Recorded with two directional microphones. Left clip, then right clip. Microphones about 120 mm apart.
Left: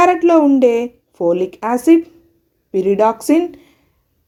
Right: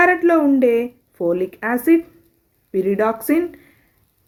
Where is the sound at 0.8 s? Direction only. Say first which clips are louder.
Left 4 dB; 10° left (ahead or behind).